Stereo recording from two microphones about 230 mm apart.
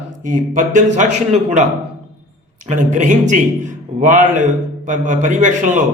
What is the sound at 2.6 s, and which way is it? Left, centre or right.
A man's voice, right.